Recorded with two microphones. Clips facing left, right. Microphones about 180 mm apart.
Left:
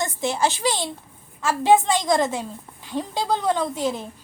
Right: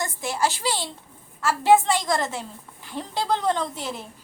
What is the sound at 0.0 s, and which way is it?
A woman's voice, 20° left (ahead or behind).